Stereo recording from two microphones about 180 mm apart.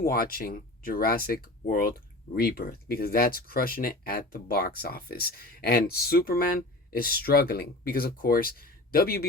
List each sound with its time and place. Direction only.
0.0 s speech: 55° left (ahead or behind)